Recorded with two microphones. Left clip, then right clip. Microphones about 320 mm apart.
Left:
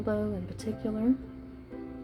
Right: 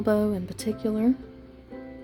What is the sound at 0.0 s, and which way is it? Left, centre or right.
Speech, right.